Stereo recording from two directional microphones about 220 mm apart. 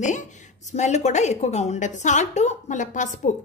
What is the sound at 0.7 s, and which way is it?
A woman's voice, 30° left (ahead or behind).